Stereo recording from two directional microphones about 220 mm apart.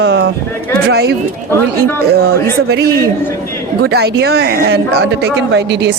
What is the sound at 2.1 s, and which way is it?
Speech, 45° right (ahead or behind).